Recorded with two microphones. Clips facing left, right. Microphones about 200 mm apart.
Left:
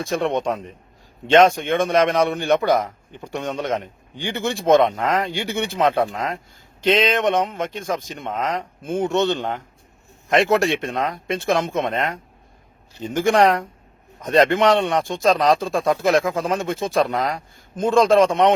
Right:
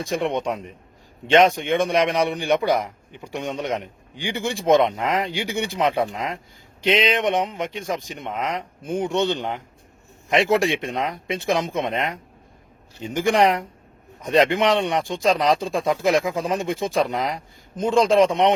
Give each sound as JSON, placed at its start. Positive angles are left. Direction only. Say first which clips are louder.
{"t": 0.0, "sound": "a man's voice", "louder": "left 2 dB", "side_deg": -15}
{"t": 10.7, "sound": "a man's voice", "louder": "left 2 dB", "side_deg": -15}